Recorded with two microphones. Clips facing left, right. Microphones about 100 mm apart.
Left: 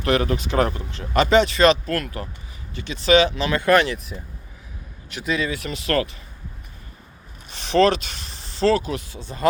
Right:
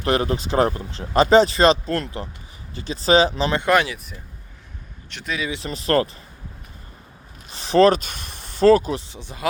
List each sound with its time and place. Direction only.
0.0 s speech: 30° right (ahead or behind)
3.6 s speech: 15° right (ahead or behind)
5.0 s speech: 5° left (ahead or behind)
5.5 s speech: 30° right (ahead or behind)
7.5 s speech: 35° right (ahead or behind)
9.0 s speech: 20° right (ahead or behind)